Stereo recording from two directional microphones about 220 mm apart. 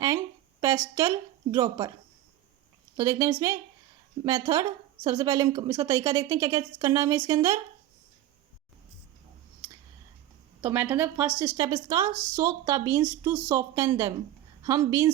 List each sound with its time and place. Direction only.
0.6 s a woman's voice: 15° right (ahead or behind)
3.0 s a woman's voice: 15° right (ahead or behind)
10.6 s a woman's voice: 10° right (ahead or behind)